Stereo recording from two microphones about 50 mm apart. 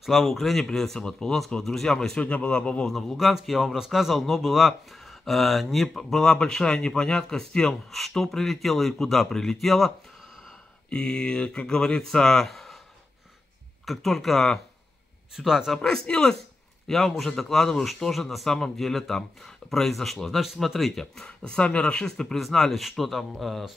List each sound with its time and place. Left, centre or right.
0.0 s speech: centre; by 2.9 s left
2.9 s speech: centre
3.2 s speech: centre
10.9 s speech: centre
13.8 s speech: centre
15.3 s speech: centre
15.8 s a man's voice: centre
21.0 s speech: centre